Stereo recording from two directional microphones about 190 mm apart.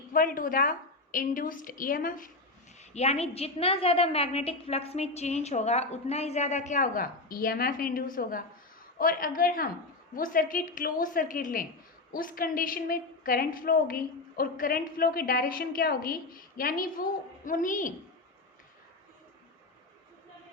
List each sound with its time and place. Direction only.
0.1 s a woman's voice: 45° left (ahead or behind)
2.9 s a woman's voice: 35° left (ahead or behind)